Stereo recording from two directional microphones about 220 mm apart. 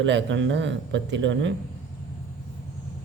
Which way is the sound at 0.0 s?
55° right (ahead or behind).